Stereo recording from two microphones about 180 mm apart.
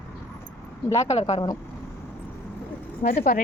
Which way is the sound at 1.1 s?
35° left (ahead or behind).